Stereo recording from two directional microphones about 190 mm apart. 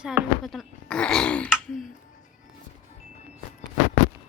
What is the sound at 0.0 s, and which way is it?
Speech, 5° right (ahead or behind).